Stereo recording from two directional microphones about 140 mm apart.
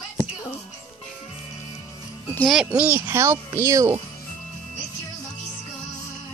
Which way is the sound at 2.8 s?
15° right (ahead or behind).